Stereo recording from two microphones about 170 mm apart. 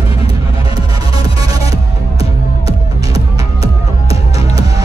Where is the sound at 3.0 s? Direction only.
20° right (ahead or behind).